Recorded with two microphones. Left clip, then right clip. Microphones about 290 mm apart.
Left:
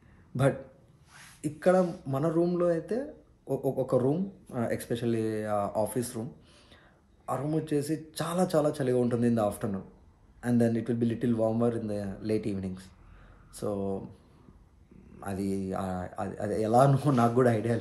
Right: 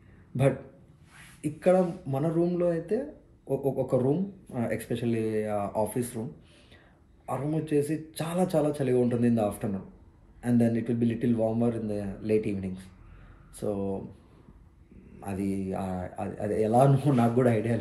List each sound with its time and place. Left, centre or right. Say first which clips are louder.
1.4 s speech: right 1 dB; centre
7.2 s speech: even; centre
15.1 s speech: right 1 dB; centre